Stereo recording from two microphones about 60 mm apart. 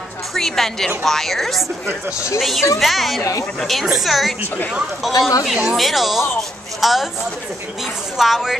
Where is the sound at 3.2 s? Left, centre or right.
Left.